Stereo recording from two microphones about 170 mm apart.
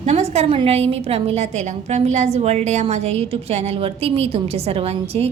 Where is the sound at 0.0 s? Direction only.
40° right (ahead or behind).